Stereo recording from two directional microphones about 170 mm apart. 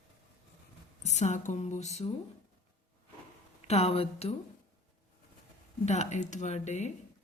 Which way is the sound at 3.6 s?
40° left (ahead or behind).